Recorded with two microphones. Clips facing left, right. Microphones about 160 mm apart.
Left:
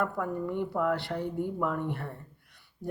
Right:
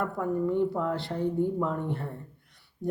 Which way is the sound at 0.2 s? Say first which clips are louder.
Right 5 dB; 30° right (ahead or behind).